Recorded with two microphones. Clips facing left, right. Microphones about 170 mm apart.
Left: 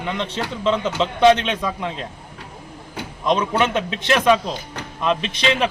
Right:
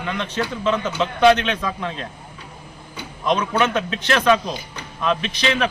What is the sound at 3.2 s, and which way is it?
A man's voice, 20° left (ahead or behind).